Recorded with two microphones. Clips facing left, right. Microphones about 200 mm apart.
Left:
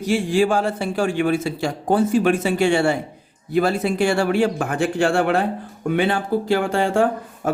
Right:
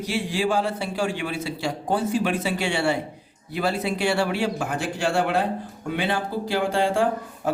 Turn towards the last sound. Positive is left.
turn(degrees=50)  # may be behind; listen again after turning